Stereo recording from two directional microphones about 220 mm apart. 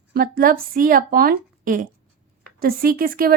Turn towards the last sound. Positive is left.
turn(degrees=-40)  # may be behind; listen again after turning